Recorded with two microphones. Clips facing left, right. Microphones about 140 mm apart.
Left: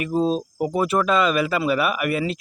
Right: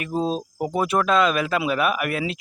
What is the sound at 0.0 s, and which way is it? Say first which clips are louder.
Speech: left 3 dB; centre (ahead or behind).